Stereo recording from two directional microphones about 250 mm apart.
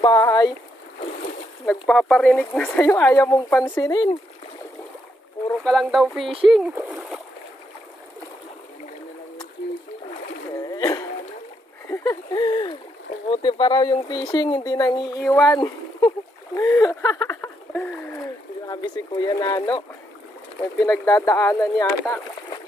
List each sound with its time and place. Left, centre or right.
0.0 s speech: centre
1.7 s speech: centre
5.6 s speech: centre
10.5 s a sound: centre
13.3 s speech: centre
20.8 s speech: centre